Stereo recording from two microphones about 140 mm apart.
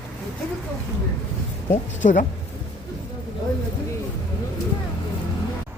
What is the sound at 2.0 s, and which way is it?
Speech, 65° left (ahead or behind).